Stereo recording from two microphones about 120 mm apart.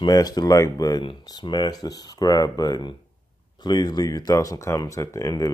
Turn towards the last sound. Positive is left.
turn(degrees=25)  # may be behind; listen again after turning